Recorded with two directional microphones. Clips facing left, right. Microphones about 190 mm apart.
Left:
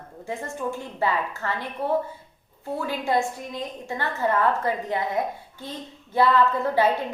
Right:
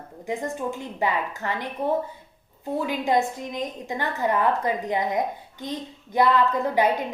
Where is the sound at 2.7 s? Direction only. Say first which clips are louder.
Right 2 dB; 15° right (ahead or behind).